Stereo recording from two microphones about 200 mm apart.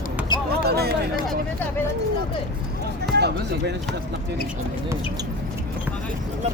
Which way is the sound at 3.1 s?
55° right (ahead or behind).